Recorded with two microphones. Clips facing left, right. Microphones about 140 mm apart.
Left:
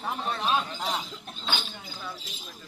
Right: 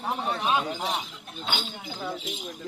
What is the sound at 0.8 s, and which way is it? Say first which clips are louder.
Speech: right 1 dB; 25° right (ahead or behind).